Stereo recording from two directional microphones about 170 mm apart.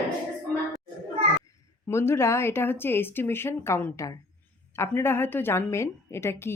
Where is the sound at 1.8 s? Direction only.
15° left (ahead or behind).